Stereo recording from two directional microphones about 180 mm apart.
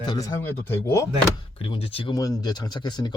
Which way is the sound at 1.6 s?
30° left (ahead or behind).